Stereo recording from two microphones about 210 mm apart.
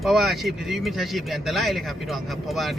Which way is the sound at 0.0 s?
Centre (ahead or behind).